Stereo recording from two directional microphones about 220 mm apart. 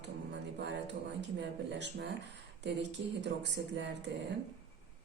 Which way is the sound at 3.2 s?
50° right (ahead or behind).